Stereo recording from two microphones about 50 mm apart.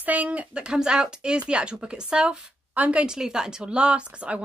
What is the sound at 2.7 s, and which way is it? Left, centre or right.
Speech, right.